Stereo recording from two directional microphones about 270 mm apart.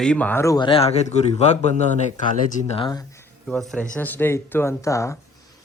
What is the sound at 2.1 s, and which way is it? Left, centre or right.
Speech, left.